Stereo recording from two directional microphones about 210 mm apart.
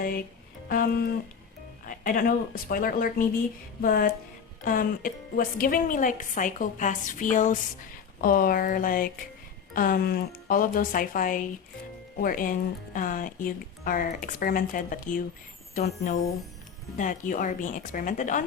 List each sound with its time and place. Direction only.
0.7 s speech: 45° left (ahead or behind)